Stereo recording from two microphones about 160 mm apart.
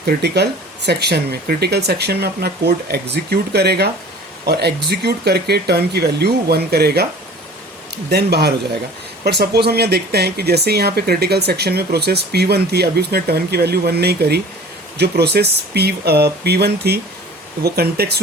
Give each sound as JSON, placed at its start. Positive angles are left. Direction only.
{"t": 0.0, "sound": "speech", "side_deg": -90}
{"t": 8.1, "sound": "speech", "side_deg": -90}
{"t": 17.6, "sound": "speech", "side_deg": -80}